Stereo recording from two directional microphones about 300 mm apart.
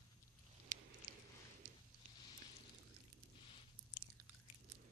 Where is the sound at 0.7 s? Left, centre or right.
Right.